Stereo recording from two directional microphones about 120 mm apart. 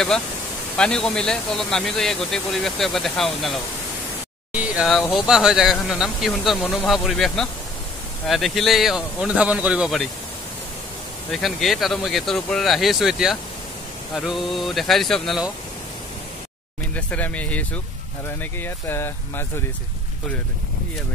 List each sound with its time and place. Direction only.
0.7 s speech: 5° left (ahead or behind)
5.1 s speech: 5° right (ahead or behind)
11.3 s speech: centre (ahead or behind)
16.9 s speech: 10° left (ahead or behind)